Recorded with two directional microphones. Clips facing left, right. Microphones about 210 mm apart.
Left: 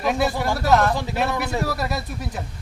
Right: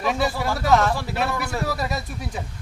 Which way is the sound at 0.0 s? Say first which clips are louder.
Left 2 dB; centre (ahead or behind).